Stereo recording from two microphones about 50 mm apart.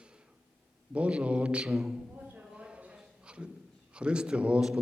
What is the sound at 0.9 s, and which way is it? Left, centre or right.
Speech, right.